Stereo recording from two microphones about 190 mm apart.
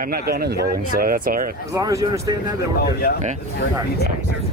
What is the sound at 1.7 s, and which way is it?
Speech, 15° right (ahead or behind).